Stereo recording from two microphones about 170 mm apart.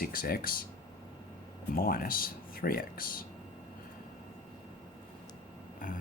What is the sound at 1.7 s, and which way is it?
Speech, 60° left (ahead or behind).